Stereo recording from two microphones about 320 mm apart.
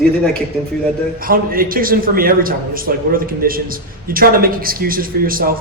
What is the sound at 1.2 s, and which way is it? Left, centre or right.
A man's voice, right.